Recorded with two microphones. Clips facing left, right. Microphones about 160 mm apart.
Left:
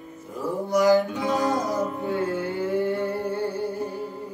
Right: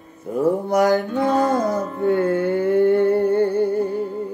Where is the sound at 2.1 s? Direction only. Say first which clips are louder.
Right 8 dB; 60° right (ahead or behind).